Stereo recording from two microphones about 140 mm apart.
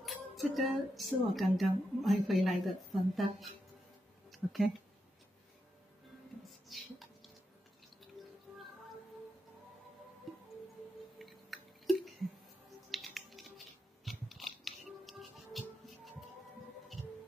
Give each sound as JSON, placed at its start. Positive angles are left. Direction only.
{"t": 0.0, "sound": "a woman's voice", "side_deg": 0}
{"t": 6.7, "sound": "a sound", "side_deg": 0}
{"t": 8.2, "sound": "music", "side_deg": 0}
{"t": 10.3, "sound": "music", "side_deg": 0}
{"t": 11.1, "sound": "a sound", "side_deg": 0}
{"t": 12.9, "sound": "finger snapping", "side_deg": 0}
{"t": 14.0, "sound": "music", "side_deg": 0}